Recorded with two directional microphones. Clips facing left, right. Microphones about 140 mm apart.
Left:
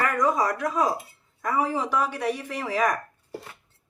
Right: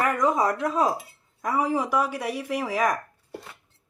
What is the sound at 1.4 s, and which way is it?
Speech, 15° right (ahead or behind).